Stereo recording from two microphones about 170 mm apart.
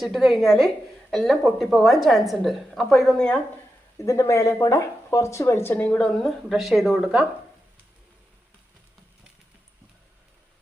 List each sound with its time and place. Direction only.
0.0 s a woman's voice: centre (ahead or behind)
3.9 s speech: 20° left (ahead or behind); by 7.3 s centre (ahead or behind)